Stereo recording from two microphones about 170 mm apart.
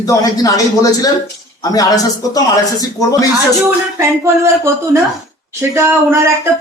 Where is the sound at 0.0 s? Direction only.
20° left (ahead or behind).